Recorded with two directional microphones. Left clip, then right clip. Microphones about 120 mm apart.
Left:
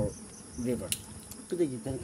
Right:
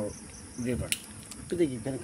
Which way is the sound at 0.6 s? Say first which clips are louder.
Even; 30° left (ahead or behind).